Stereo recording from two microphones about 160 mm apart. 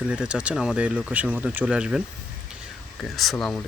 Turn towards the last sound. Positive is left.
turn(degrees=0)  # may be behind; listen again after turning